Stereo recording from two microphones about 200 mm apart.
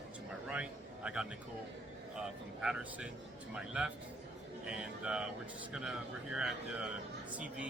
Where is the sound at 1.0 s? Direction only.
5° right (ahead or behind).